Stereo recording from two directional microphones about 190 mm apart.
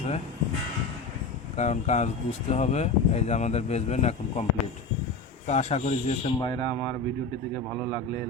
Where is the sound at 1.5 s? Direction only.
35° left (ahead or behind).